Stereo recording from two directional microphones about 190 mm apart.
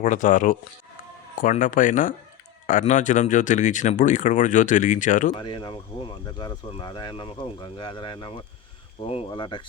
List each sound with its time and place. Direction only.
0.0 s speech: 40° left (ahead or behind)
5.4 s speech: 25° left (ahead or behind)